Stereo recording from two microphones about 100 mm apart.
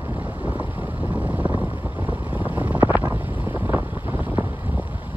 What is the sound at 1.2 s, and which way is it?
Vehicle, 15° right (ahead or behind).